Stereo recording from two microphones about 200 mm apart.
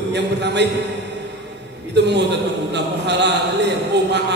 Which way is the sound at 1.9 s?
60° right (ahead or behind).